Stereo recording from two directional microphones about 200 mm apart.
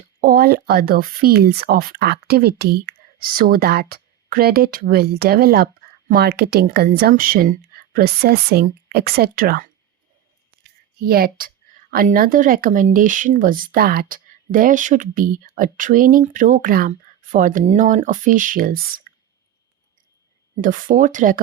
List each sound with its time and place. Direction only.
0.2 s speech: 50° right (ahead or behind)
11.0 s speech: 50° right (ahead or behind)
20.6 s speech: 45° right (ahead or behind)